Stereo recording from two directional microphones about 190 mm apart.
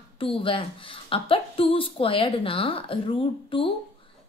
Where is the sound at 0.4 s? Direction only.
30° left (ahead or behind).